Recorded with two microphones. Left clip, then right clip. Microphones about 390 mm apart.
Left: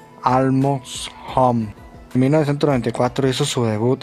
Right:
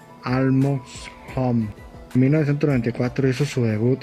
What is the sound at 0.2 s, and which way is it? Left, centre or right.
Speech, left.